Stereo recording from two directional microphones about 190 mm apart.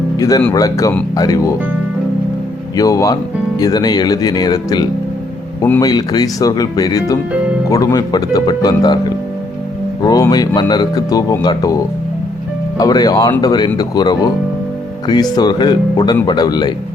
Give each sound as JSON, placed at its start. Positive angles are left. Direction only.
{"t": 0.2, "sound": "speech", "side_deg": 20}
{"t": 2.7, "sound": "speech", "side_deg": 15}